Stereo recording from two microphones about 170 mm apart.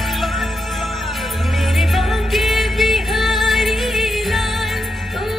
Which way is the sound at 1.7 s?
Centre (ahead or behind).